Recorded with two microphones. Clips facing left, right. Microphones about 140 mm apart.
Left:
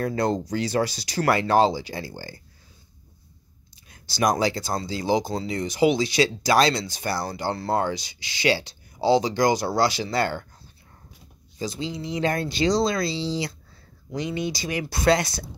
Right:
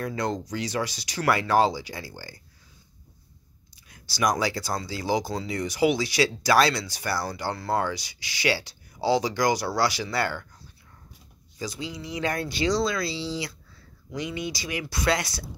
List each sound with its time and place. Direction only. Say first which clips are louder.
0.0 s speech: left 5 dB; 35° left (ahead or behind)
3.7 s speech: left 4 dB; 25° left (ahead or behind)
11.5 s speech: left 4 dB; 25° left (ahead or behind)